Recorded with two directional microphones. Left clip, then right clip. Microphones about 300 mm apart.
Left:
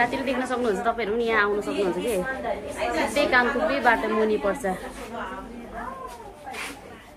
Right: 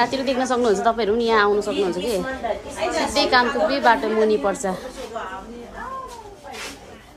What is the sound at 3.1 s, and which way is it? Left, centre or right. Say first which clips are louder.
A woman's voice: right 3 dB; centre.